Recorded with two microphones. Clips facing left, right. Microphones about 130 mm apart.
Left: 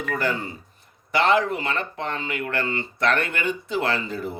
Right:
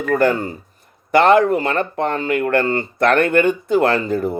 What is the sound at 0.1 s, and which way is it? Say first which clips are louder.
Speech: right 11 dB; 50° right (ahead or behind).